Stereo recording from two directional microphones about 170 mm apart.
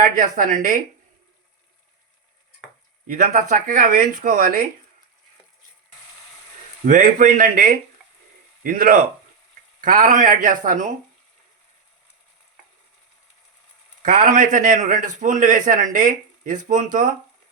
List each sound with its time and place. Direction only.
0.0 s a man's voice: 50° right (ahead or behind)
3.1 s a man's voice: 55° right (ahead or behind)
6.8 s a man's voice: 50° right (ahead or behind)
14.0 s a man's voice: 50° right (ahead or behind)